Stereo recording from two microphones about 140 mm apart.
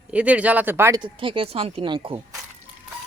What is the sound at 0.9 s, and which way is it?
Speech, 35° right (ahead or behind).